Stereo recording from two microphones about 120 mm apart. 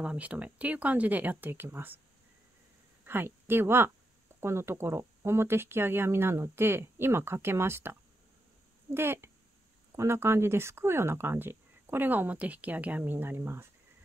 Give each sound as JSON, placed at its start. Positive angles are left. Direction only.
{"t": 0.0, "sound": "speech", "side_deg": -10}
{"t": 3.1, "sound": "speech", "side_deg": -20}